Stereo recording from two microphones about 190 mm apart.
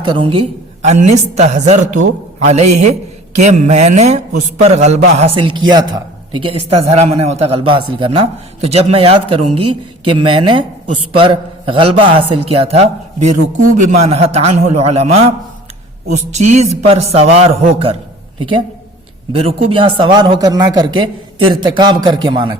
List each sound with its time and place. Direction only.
0.0 s a man's voice: 25° right (ahead or behind)